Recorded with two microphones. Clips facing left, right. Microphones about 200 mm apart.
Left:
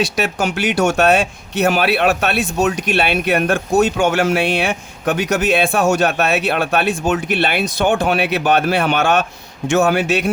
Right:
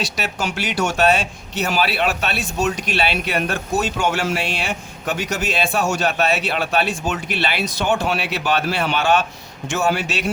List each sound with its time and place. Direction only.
0.3 s a man's voice: 55° left (ahead or behind)